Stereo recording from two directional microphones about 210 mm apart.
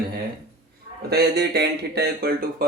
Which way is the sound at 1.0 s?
50° right (ahead or behind).